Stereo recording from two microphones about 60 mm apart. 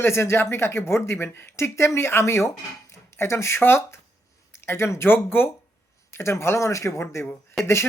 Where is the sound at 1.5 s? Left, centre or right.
Left.